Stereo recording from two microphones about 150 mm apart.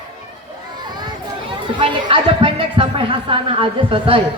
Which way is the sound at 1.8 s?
35° right (ahead or behind).